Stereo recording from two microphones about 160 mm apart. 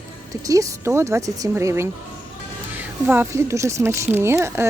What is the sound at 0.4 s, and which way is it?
Speech, 20° right (ahead or behind).